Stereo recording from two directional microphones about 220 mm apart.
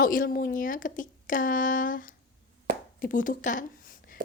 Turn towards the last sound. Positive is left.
turn(degrees=35)  # may be behind; listen again after turning